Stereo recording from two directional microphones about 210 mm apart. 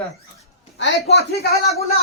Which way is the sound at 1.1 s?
50° left (ahead or behind).